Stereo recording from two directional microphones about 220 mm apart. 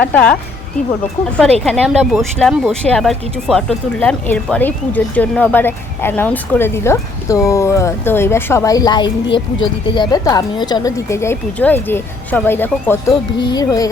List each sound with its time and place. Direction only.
0.0 s speech: 5° left (ahead or behind)
1.7 s speech: centre (ahead or behind)